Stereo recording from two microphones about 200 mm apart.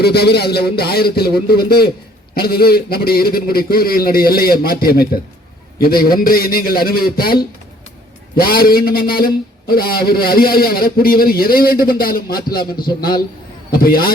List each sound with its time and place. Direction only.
0.0 s a man's voice: 55° left (ahead or behind)
8.4 s a man's voice: 50° left (ahead or behind)
13.7 s a man's voice: 50° left (ahead or behind)